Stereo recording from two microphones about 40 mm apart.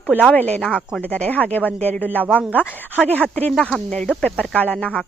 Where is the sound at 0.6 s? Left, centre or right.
Centre.